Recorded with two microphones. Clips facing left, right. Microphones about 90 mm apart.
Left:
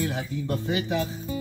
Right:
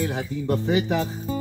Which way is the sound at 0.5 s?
30° right (ahead or behind).